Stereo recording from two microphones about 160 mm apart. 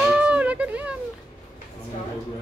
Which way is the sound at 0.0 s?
5° right (ahead or behind).